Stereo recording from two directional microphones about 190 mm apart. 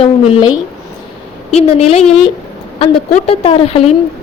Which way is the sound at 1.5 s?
35° left (ahead or behind).